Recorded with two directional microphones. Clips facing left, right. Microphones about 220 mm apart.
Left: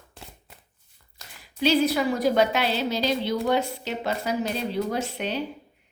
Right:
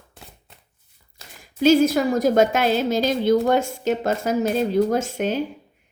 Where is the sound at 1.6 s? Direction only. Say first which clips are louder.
Right 6 dB; 45° right (ahead or behind).